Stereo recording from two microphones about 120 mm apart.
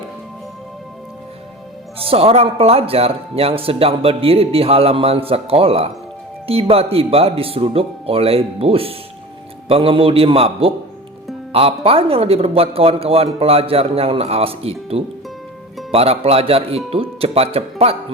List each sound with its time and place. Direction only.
2.0 s speech: 55° right (ahead or behind)